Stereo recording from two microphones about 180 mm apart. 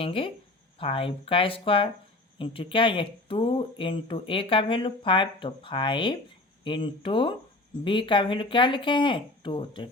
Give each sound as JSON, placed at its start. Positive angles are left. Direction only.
{"t": 0.0, "sound": "speech", "side_deg": 30}